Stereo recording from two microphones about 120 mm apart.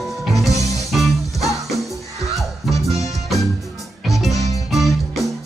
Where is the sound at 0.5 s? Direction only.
25° left (ahead or behind).